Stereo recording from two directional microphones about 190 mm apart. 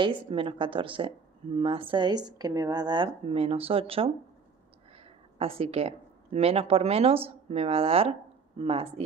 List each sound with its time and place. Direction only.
0.0 s speech: 25° right (ahead or behind)